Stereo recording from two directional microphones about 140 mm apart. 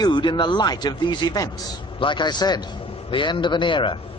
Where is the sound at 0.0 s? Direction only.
35° left (ahead or behind).